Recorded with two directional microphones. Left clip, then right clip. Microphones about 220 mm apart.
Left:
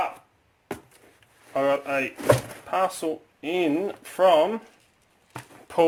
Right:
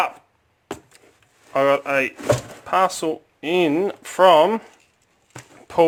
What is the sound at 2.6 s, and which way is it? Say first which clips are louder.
Speech: right 6 dB; 25° right (ahead or behind).